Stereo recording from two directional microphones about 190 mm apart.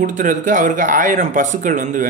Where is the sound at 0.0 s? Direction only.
45° right (ahead or behind).